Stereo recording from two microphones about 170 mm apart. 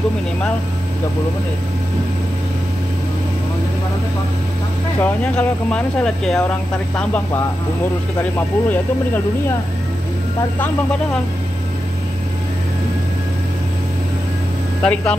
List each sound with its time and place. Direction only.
5.0 s speech: 10° left (ahead or behind)
8.2 s speech: 10° left (ahead or behind)
14.8 s speech: 5° left (ahead or behind)